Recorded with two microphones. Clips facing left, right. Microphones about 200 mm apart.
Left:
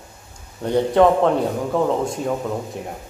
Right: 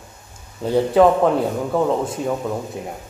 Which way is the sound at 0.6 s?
5° right (ahead or behind).